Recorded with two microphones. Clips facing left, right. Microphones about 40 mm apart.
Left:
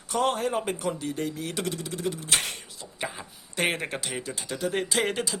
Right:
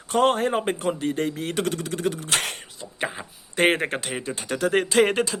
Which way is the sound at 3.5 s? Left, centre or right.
Right.